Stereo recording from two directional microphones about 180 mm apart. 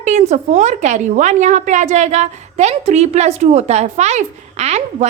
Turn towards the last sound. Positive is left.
turn(degrees=-35)  # may be behind; listen again after turning